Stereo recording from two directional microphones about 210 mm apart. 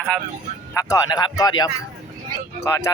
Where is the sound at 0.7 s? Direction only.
15° left (ahead or behind).